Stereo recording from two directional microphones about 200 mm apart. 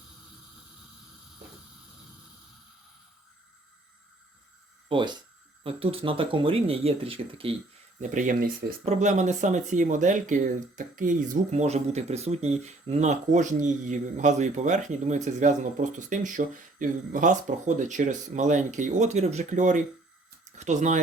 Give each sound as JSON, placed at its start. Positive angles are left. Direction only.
{"t": 4.9, "sound": "speech", "side_deg": -25}
{"t": 8.1, "sound": "speech", "side_deg": -40}